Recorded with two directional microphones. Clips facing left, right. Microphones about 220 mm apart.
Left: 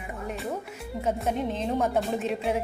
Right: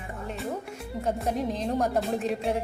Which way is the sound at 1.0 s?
Centre (ahead or behind).